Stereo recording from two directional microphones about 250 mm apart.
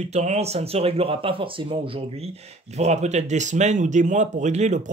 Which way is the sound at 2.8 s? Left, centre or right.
Right.